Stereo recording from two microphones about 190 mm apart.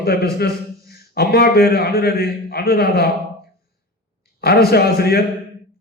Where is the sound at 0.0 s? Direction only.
55° left (ahead or behind).